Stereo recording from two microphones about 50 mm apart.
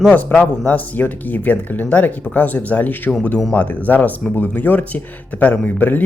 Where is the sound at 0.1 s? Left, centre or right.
Left.